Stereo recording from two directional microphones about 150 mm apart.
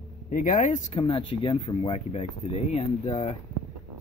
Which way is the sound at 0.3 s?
60° left (ahead or behind).